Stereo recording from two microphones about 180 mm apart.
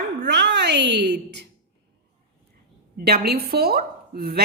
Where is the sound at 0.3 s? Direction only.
70° right (ahead or behind).